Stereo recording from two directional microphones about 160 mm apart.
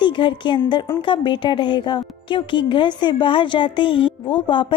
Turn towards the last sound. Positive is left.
turn(degrees=30)  # may be behind; listen again after turning